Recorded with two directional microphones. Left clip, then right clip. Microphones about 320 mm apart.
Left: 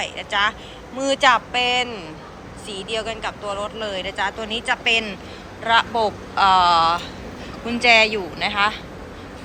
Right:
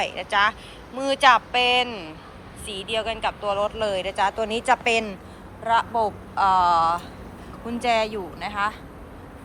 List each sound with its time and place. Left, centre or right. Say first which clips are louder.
0.0 s speech: even; centre